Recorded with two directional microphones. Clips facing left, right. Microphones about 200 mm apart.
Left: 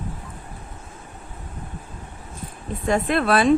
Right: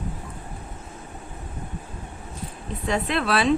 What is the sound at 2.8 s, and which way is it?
Speech, 50° left (ahead or behind).